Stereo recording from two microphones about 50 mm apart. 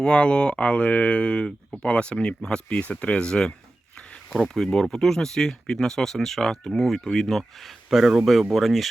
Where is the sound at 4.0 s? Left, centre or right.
Left.